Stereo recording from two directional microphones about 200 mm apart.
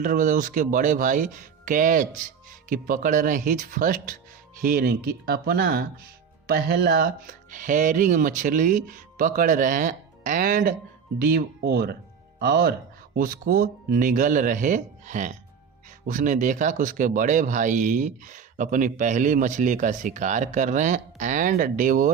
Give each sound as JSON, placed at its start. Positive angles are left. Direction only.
{"t": 0.0, "sound": "speech", "side_deg": -40}